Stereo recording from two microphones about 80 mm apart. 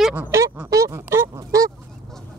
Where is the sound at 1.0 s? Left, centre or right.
Right.